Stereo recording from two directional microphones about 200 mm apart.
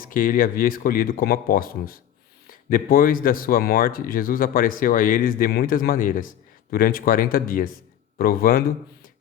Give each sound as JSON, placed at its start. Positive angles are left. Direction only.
{"t": 0.0, "sound": "speech", "side_deg": 45}